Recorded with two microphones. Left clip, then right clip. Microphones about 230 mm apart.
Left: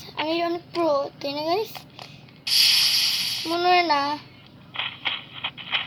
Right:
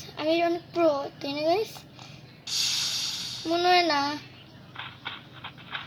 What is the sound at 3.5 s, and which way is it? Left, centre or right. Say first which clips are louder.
Speech: left 2 dB; centre.